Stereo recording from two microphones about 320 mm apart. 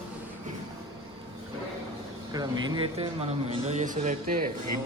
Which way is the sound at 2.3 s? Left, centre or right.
Centre.